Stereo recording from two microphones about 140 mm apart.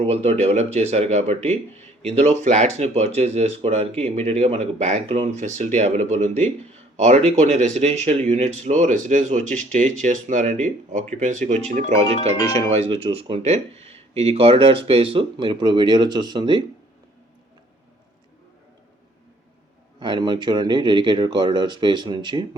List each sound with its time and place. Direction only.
0.0 s speech: 50° right (ahead or behind); by 16.6 s 30° right (ahead or behind)
20.0 s speech: 35° right (ahead or behind)